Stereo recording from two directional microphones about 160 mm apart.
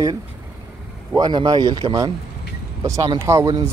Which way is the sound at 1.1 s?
25° right (ahead or behind).